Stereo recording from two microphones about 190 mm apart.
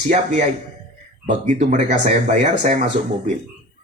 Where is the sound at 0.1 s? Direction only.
40° right (ahead or behind).